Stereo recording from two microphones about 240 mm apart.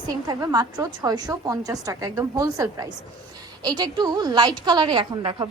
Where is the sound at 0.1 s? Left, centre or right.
Centre.